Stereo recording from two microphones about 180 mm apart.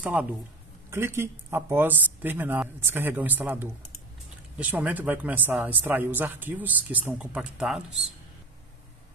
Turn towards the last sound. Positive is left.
turn(degrees=-5)  # may be behind; listen again after turning